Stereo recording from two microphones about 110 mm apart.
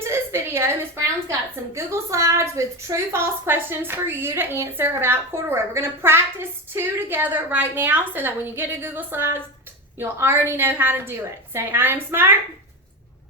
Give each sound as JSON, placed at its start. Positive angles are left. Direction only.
{"t": 0.0, "sound": "a woman's voice", "side_deg": -25}